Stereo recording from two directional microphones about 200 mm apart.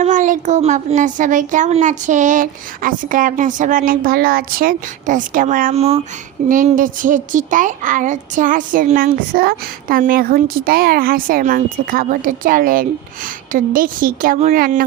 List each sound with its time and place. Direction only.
0.0 s a woman's voice: 40° right (ahead or behind)